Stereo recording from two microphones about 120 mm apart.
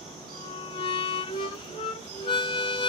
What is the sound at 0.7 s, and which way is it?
Music, 50° left (ahead or behind).